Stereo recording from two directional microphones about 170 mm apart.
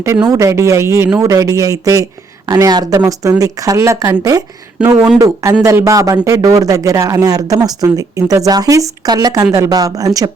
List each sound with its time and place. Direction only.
0.0 s speech: 15° right (ahead or behind)